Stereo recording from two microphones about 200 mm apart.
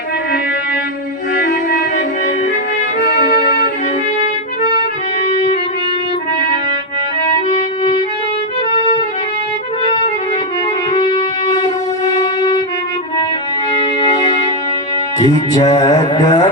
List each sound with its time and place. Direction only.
1.4 s music: 45° left (ahead or behind)
3.0 s music: 40° left (ahead or behind)
10.9 s music: 25° left (ahead or behind)
14.0 s music: 25° left (ahead or behind)
15.2 s speech: 20° left (ahead or behind)